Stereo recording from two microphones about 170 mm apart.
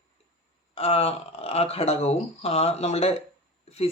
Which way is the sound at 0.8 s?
35° left (ahead or behind).